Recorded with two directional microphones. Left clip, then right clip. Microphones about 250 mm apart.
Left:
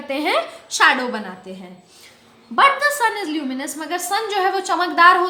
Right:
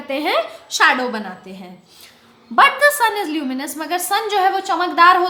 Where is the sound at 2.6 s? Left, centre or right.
Right.